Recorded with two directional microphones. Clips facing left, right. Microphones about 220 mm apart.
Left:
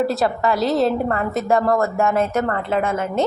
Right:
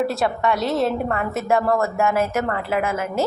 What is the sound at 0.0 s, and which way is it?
A woman's voice, centre (ahead or behind).